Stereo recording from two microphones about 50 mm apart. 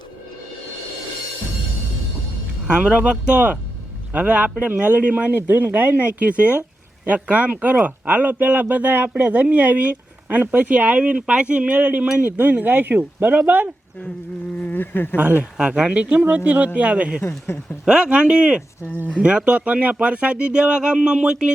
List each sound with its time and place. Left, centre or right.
2.6 s speech: right
14.6 s speech: left
15.1 s speech: right
15.5 s speech: centre
17.4 s speech: left
17.8 s speech: centre